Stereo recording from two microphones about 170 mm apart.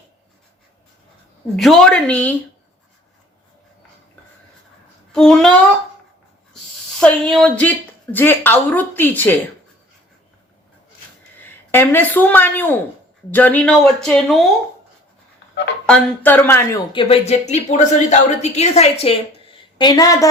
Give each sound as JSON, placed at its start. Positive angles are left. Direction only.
{"t": 1.5, "sound": "speech", "side_deg": 5}
{"t": 5.1, "sound": "speech", "side_deg": 5}
{"t": 7.0, "sound": "speech", "side_deg": 5}
{"t": 11.7, "sound": "speech", "side_deg": 15}
{"t": 15.9, "sound": "speech", "side_deg": 10}
{"t": 16.9, "sound": "a woman's voice", "side_deg": 30}